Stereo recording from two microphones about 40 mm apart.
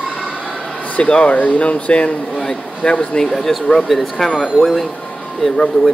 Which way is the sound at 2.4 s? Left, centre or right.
Left.